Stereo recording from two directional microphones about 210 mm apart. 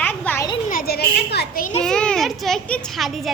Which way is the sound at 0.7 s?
45° left (ahead or behind).